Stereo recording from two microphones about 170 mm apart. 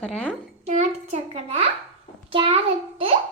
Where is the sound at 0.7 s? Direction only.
40° right (ahead or behind).